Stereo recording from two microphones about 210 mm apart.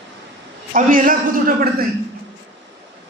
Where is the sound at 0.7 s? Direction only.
40° right (ahead or behind).